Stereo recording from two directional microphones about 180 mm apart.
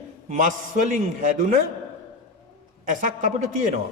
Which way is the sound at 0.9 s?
40° right (ahead or behind).